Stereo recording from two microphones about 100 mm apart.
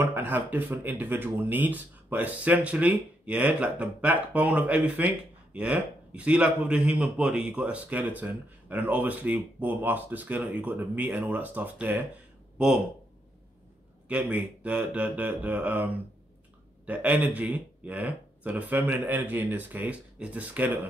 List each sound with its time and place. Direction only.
0.0 s speech: 20° right (ahead or behind)
14.0 s speech: 15° right (ahead or behind)